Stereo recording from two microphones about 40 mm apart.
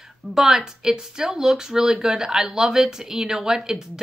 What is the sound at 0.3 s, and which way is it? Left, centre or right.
Speech, centre.